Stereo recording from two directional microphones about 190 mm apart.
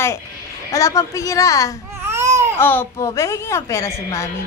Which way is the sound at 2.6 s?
10° left (ahead or behind).